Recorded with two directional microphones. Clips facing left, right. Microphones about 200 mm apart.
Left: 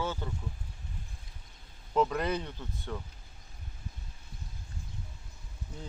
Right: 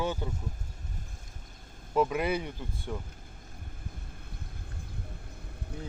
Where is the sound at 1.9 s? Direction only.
10° right (ahead or behind).